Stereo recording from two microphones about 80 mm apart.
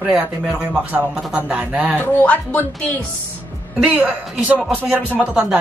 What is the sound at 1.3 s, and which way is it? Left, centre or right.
Speech, centre.